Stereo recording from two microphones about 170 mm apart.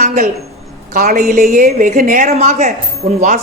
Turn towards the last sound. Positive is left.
turn(degrees=-40)  # may be behind; listen again after turning